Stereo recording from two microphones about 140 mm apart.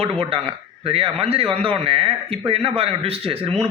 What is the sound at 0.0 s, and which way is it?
A man's voice, 40° right (ahead or behind).